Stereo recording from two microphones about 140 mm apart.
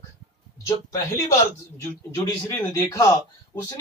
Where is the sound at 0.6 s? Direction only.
20° left (ahead or behind).